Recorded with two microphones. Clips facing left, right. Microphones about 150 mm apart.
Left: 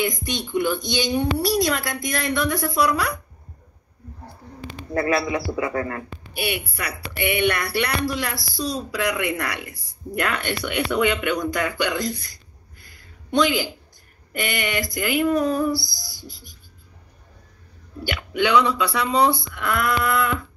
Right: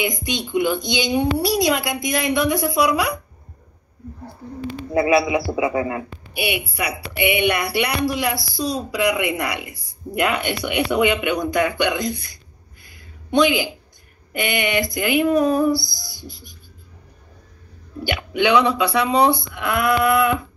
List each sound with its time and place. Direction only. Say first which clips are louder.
0.0 s a woman's voice: right 1 dB; 10° right (ahead or behind)
4.9 s a woman's voice: right 5 dB; 15° right (ahead or behind)
13.4 s a woman's voice: right 3 dB; 15° right (ahead or behind)
15.9 s owl: right 3 dB; 20° right (ahead or behind)
16.3 s speech: right 4 dB; 60° right (ahead or behind)
18.0 s speech: right 3 dB; 20° right (ahead or behind)